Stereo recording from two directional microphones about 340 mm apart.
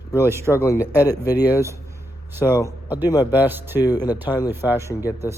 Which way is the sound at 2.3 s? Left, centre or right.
Centre.